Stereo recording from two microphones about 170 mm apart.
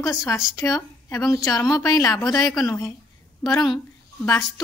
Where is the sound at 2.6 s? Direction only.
20° left (ahead or behind).